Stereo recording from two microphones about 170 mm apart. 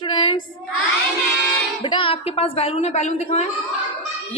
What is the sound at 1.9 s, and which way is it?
A woman's voice, 30° left (ahead or behind).